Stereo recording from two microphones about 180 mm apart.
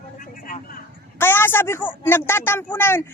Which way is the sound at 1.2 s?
10° left (ahead or behind).